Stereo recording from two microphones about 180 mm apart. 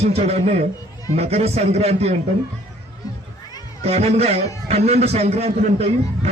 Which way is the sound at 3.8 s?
35° right (ahead or behind).